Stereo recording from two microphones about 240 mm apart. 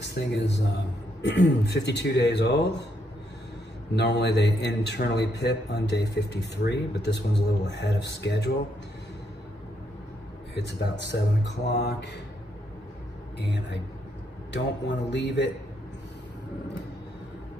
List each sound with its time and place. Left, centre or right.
0.0 s a man's voice: left
3.9 s a man's voice: left
10.5 s a man's voice: left
13.4 s a man's voice: left
15.0 s a man's voice: left